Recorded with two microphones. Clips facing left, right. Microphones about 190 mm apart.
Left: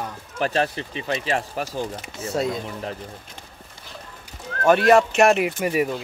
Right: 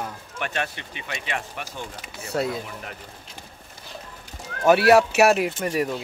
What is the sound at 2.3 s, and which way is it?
Speech, centre (ahead or behind).